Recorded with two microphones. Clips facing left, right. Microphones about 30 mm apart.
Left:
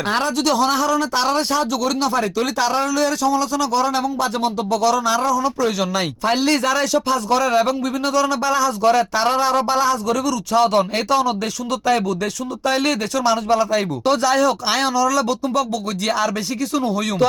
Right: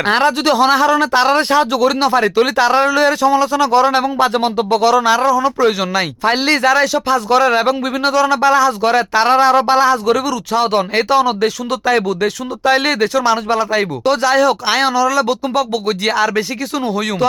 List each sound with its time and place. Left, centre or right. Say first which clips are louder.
0.1 s a man's voice: right 5 dB; right
13.1 s speech: right 3 dB; right